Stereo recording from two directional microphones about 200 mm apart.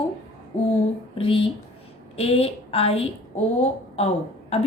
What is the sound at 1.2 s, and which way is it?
A woman's voice, 25° left (ahead or behind).